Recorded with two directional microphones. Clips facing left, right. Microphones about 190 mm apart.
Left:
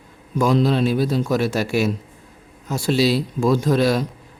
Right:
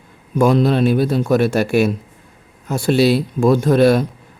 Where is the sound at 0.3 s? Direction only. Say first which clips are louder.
Right 4 dB; 55° right (ahead or behind).